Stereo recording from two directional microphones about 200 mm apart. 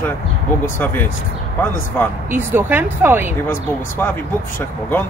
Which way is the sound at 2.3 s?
10° right (ahead or behind).